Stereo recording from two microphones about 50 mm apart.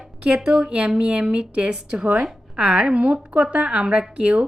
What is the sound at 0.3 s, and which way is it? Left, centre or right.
Speech, centre.